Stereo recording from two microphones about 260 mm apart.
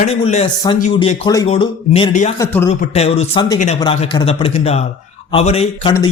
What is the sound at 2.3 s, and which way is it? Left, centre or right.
Speech, centre.